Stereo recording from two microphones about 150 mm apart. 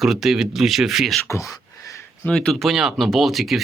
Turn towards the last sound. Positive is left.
turn(degrees=0)  # may be behind; listen again after turning